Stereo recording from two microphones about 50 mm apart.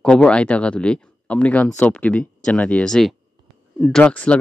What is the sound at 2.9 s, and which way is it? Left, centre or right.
Speech, centre.